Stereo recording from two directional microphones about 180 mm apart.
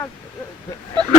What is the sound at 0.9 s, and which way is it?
Speech, 25° right (ahead or behind).